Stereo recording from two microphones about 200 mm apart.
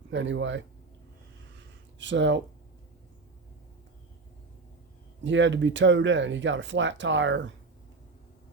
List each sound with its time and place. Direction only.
0.1 s speech: 65° right (ahead or behind)
2.0 s speech: 65° right (ahead or behind)
5.2 s speech: 65° right (ahead or behind)